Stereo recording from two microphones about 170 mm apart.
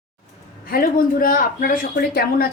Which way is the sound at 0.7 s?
55° left (ahead or behind).